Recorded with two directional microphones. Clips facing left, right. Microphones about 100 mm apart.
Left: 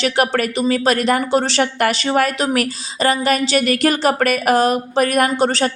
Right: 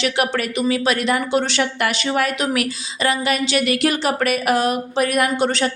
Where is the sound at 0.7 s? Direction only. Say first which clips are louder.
Left 4 dB; 40° left (ahead or behind).